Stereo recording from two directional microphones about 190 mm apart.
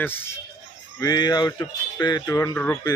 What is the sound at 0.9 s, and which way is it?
Speech, 20° left (ahead or behind).